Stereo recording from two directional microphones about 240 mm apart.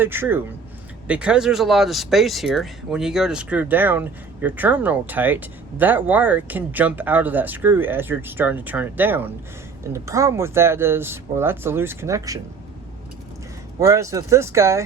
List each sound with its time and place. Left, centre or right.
0.0 s speech: centre
13.7 s speech: centre